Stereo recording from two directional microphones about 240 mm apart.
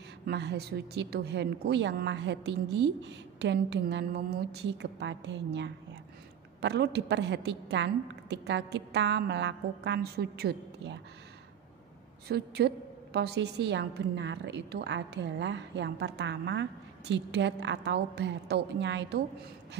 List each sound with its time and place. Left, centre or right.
0.2 s a woman's voice: right
12.3 s a woman's voice: right